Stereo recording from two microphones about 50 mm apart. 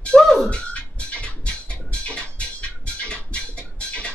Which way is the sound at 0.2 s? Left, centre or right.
Centre.